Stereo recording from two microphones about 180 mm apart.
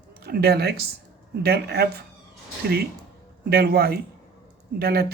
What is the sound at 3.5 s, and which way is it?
Speech, 60° right (ahead or behind).